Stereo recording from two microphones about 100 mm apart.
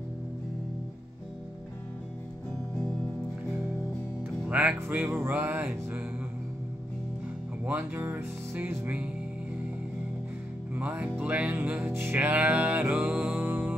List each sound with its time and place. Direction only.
4.2 s music: 15° right (ahead or behind)
7.6 s music: 20° right (ahead or behind)
10.7 s music: 15° right (ahead or behind)